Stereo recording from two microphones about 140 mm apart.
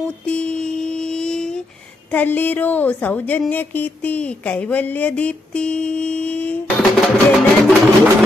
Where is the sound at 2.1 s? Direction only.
10° left (ahead or behind).